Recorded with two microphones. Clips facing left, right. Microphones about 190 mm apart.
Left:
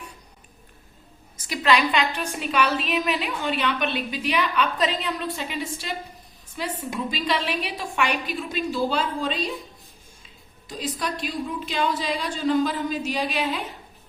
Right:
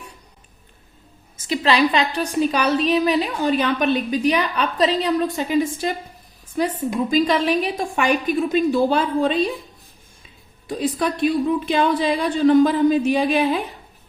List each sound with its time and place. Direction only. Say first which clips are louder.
1.4 s a woman's voice: right 4 dB; 30° right (ahead or behind); by 9.5 s 55° right (ahead or behind)
10.7 s a woman's voice: right 8 dB; 55° right (ahead or behind)